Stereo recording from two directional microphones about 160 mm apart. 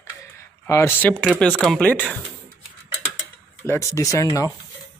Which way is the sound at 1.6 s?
5° left (ahead or behind).